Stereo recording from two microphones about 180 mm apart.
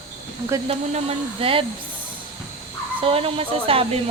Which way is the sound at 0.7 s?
30° right (ahead or behind).